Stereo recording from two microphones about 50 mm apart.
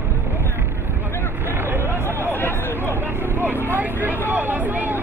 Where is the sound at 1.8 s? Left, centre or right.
Left.